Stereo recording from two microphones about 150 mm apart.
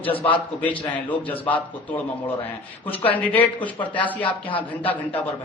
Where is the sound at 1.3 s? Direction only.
10° left (ahead or behind).